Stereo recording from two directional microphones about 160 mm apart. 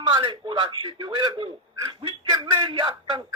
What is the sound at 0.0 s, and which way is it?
A man's voice, 30° right (ahead or behind).